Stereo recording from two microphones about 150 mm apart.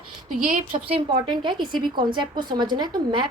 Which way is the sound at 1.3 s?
30° right (ahead or behind).